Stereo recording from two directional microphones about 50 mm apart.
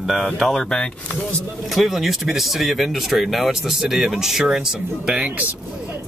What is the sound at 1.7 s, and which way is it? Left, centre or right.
Speech, centre.